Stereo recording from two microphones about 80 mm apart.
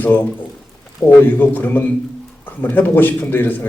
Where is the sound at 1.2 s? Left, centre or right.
Left.